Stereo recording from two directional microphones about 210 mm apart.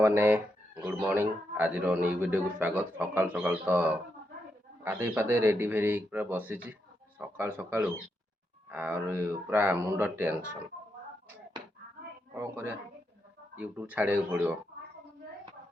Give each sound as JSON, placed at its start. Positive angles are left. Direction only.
{"t": 0.0, "sound": "a man's voice", "side_deg": -10}
{"t": 12.3, "sound": "a man's voice", "side_deg": -10}